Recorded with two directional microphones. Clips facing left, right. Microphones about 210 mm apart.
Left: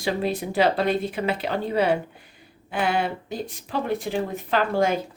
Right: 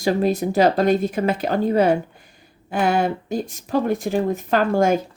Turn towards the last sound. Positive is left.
turn(degrees=-45)  # may be behind; listen again after turning